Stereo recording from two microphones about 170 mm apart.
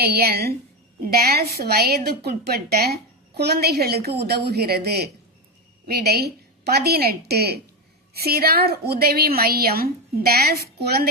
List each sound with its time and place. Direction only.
0.0 s a woman's voice: 65° right (ahead or behind)